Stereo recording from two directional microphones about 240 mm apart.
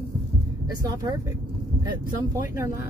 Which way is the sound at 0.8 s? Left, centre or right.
Centre.